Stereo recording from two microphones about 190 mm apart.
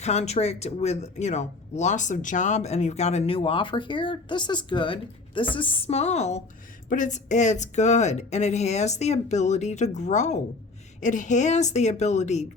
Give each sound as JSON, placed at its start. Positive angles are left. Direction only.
{"t": 0.0, "sound": "speech", "side_deg": 35}